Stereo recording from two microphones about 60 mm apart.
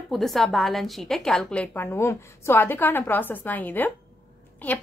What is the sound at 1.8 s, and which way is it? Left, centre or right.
Speech, left.